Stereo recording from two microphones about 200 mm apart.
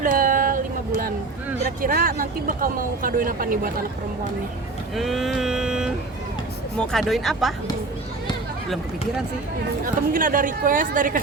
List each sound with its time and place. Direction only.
0.0 s a sound: 45° right (ahead or behind)
1.8 s speech: 45° right (ahead or behind)
4.9 s vehicle: centre (ahead or behind)
9.8 s speech: 45° right (ahead or behind)